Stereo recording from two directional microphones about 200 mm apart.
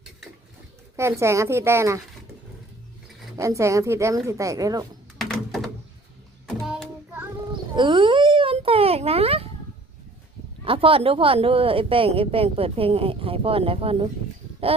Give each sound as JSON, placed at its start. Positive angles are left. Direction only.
{"t": 0.9, "sound": "speech", "side_deg": -15}
{"t": 3.3, "sound": "speech", "side_deg": -15}
{"t": 5.1, "sound": "a sound", "side_deg": 0}
{"t": 6.7, "sound": "child singing", "side_deg": -5}
{"t": 7.8, "sound": "a sound", "side_deg": -25}
{"t": 10.6, "sound": "speech", "side_deg": -25}